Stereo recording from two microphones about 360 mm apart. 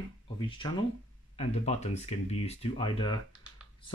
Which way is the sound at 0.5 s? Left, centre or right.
Centre.